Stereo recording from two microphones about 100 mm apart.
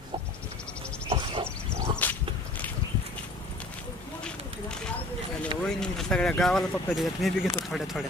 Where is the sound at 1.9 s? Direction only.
15° left (ahead or behind).